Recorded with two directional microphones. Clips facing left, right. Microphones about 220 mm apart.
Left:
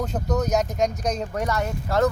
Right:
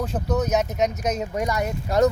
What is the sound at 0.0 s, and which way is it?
Speech, 5° right (ahead or behind).